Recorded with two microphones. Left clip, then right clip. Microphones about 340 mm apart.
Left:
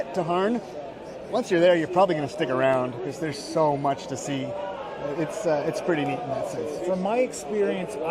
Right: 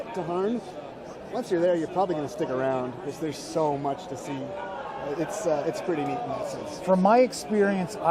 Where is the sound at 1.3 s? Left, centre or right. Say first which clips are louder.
Left 5 dB; left.